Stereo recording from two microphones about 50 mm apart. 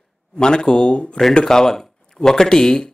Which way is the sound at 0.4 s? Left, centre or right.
Centre.